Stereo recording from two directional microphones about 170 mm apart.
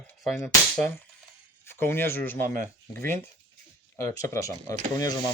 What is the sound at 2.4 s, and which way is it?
Speech, 55° right (ahead or behind).